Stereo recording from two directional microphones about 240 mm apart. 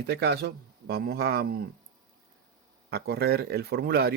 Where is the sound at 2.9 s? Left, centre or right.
Right.